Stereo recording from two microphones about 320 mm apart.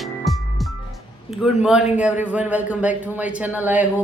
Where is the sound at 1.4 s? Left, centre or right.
Centre.